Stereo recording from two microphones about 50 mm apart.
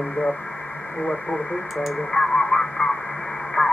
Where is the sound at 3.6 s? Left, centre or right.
Left.